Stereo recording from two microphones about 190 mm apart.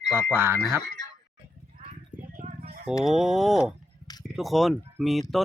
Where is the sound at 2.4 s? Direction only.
40° right (ahead or behind).